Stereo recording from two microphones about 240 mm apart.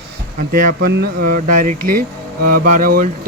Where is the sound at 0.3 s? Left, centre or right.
Right.